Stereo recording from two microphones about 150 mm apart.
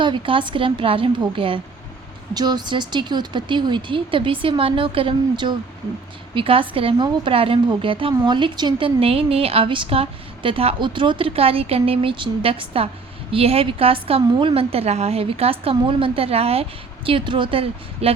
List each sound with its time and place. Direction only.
0.0 s a woman's voice: 35° right (ahead or behind)